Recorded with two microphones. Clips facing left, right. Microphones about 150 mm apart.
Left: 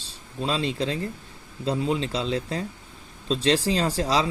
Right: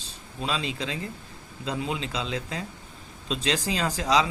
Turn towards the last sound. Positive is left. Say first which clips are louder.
# left 1 dB
turn(degrees=35)  # may be behind; listen again after turning